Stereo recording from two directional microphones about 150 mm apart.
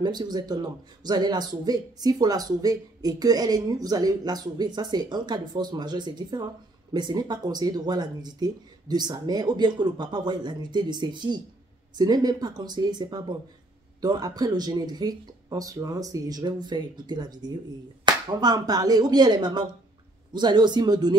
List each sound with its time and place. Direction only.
0.0 s speech: 30° right (ahead or behind)